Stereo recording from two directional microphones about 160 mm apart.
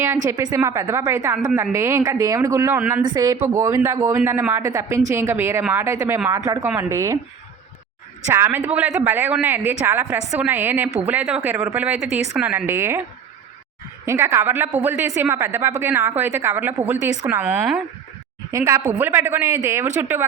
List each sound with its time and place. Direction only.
0.3 s a woman's voice: 25° right (ahead or behind)
8.3 s a woman's voice: 15° right (ahead or behind)
14.0 s a woman's voice: 15° right (ahead or behind)